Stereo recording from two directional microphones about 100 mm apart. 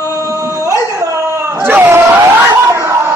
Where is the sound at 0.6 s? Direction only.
30° right (ahead or behind).